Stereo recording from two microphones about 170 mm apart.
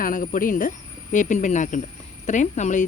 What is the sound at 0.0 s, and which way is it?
Speech, 50° left (ahead or behind).